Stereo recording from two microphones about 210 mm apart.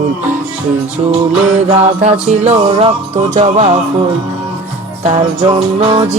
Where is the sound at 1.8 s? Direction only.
30° right (ahead or behind).